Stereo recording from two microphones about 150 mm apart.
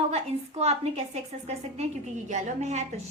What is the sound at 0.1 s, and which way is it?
A woman's voice, 45° right (ahead or behind).